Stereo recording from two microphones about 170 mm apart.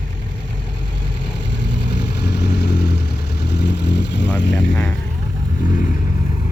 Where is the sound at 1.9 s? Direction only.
75° left (ahead or behind).